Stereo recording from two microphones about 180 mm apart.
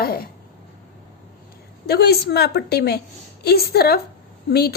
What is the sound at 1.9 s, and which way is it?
A woman's voice, 60° left (ahead or behind).